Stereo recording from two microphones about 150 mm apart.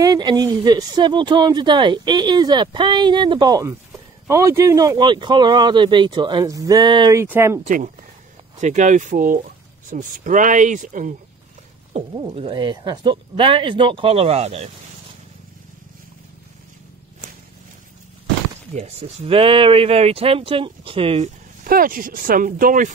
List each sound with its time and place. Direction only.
0.0 s speech: 25° right (ahead or behind)
7.2 s speech: 15° right (ahead or behind)
7.6 s speech: 60° right (ahead or behind)
12.1 s speech: 30° right (ahead or behind)
18.7 s speech: 45° right (ahead or behind)
21.6 s speech: 70° right (ahead or behind)